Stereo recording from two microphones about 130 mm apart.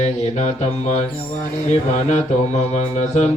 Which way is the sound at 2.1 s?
60° left (ahead or behind).